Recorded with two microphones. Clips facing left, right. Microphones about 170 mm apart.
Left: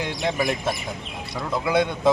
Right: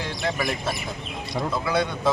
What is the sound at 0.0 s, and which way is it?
Speech, 20° left (ahead or behind).